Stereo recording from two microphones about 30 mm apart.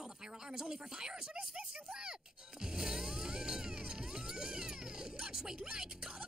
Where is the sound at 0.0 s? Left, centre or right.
Right.